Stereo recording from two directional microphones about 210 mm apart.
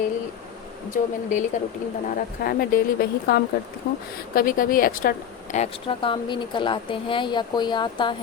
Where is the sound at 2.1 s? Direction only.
45° left (ahead or behind).